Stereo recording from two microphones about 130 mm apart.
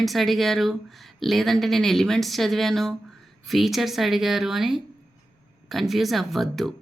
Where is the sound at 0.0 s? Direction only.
Centre (ahead or behind).